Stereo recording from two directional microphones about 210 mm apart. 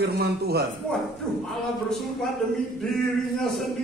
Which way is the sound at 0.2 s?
50° right (ahead or behind).